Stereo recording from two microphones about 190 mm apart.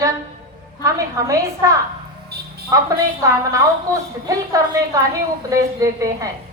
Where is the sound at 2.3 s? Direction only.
55° right (ahead or behind).